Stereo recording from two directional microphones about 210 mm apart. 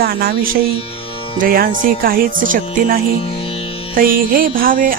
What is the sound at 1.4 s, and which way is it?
Speech, 45° right (ahead or behind).